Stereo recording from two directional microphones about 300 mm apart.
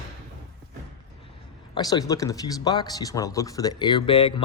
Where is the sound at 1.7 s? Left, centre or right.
Centre.